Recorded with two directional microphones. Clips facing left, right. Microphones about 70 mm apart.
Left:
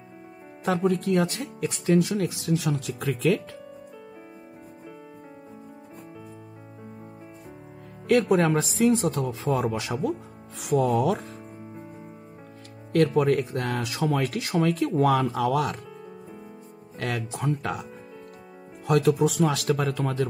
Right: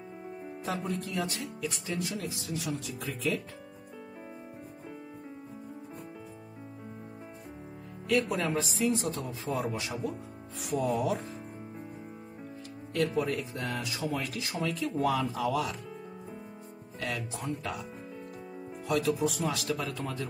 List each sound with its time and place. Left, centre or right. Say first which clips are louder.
0.7 s speech: left 11 dB; left
1.9 s speech: left 15 dB; left
8.1 s speech: left 8 dB; left
10.6 s speech: left 7 dB; left
12.9 s speech: left 9 dB; left
16.9 s speech: left 5 dB; left
18.9 s speech: left 7 dB; left